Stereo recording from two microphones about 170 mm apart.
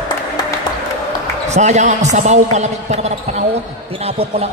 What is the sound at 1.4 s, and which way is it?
A man's voice, 40° right (ahead or behind).